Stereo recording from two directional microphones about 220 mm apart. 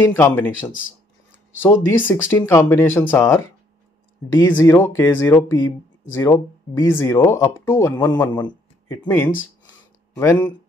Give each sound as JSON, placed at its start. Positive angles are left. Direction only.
{"t": 0.1, "sound": "speech", "side_deg": 10}
{"t": 1.6, "sound": "speech", "side_deg": 10}
{"t": 4.5, "sound": "speech", "side_deg": 10}
{"t": 9.0, "sound": "speech", "side_deg": 10}